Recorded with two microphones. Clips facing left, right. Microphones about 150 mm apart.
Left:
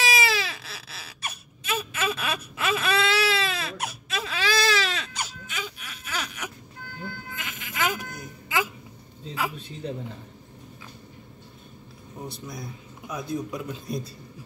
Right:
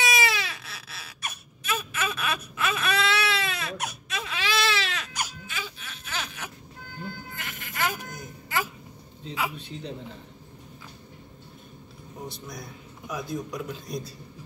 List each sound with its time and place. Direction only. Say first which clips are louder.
0.1 s baby cry: left 1 dB; 30° left (ahead or behind)
5.1 s wail: even; 15° left (ahead or behind)
7.3 s bleat: left 2 dB; 20° left (ahead or behind)
12.3 s a man's voice: left 2 dB; centre (ahead or behind)